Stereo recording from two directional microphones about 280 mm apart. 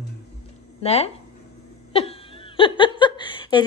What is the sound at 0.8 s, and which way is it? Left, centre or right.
Speech, left.